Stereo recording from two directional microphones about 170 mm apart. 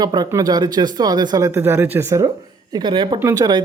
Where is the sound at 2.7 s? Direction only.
30° right (ahead or behind).